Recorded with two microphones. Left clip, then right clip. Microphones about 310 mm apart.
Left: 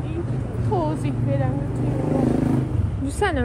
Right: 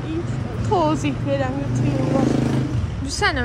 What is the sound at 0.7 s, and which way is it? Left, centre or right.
Speech, right.